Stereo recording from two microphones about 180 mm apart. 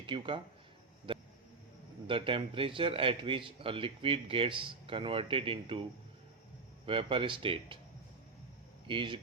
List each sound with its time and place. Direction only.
0.0 s speech: 30° right (ahead or behind)
1.1 s a sound: 25° right (ahead or behind)
2.0 s a man's voice: 30° right (ahead or behind)
6.8 s a man's voice: 30° right (ahead or behind)
8.9 s a man's voice: 30° right (ahead or behind)